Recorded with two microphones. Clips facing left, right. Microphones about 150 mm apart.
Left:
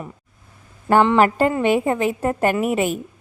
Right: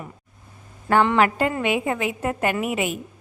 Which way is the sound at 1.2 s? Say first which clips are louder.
Left 4 dB; 35° left (ahead or behind).